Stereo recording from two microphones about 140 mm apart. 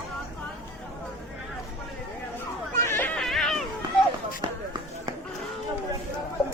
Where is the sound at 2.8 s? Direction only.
15° left (ahead or behind).